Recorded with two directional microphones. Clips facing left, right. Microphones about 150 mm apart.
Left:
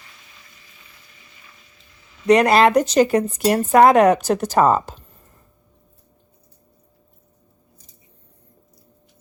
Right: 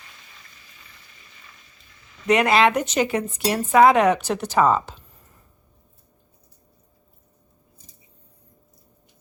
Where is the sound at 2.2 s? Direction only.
35° left (ahead or behind).